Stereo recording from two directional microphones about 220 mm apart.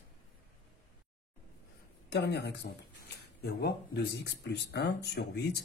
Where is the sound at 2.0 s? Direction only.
50° left (ahead or behind).